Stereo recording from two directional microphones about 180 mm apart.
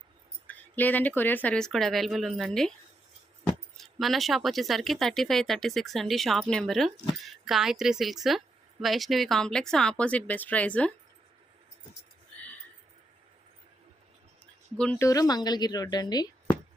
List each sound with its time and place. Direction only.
0.4 s speech: 10° left (ahead or behind)
3.8 s speech: centre (ahead or behind)
14.8 s speech: 10° left (ahead or behind)